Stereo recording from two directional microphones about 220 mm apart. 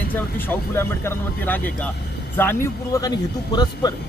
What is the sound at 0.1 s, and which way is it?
Speech, 10° left (ahead or behind).